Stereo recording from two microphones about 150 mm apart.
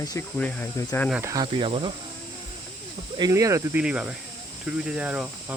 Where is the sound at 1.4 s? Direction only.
35° right (ahead or behind).